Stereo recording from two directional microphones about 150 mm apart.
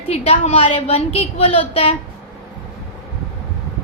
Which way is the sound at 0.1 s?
45° left (ahead or behind).